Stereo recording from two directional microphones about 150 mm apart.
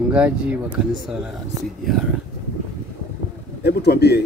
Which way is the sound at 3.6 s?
90° left.